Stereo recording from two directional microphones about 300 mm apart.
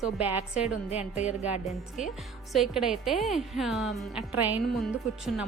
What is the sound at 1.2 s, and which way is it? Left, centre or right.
Speech, centre.